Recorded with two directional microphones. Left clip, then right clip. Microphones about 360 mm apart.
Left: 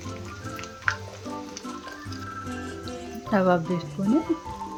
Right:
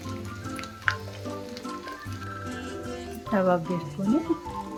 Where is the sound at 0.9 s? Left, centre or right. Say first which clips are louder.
Even; centre.